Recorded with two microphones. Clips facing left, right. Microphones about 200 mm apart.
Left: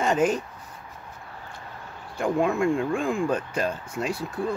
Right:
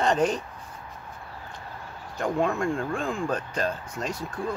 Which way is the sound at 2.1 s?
10° left (ahead or behind).